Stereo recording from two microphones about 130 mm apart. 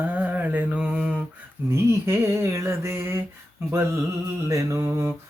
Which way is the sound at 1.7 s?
20° right (ahead or behind).